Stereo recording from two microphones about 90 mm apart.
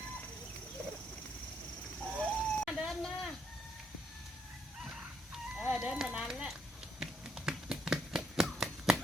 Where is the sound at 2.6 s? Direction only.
5° right (ahead or behind).